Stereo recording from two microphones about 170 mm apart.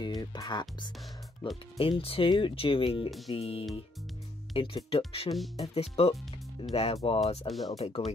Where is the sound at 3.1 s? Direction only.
Centre (ahead or behind).